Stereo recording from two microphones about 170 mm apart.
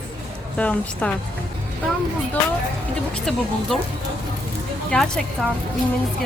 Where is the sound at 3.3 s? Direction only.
Centre (ahead or behind).